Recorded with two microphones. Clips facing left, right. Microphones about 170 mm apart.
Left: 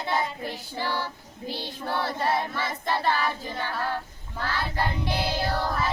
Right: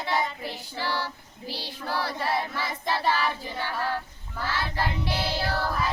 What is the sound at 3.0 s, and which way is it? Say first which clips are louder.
Child singing: even; 15° right (ahead or behind).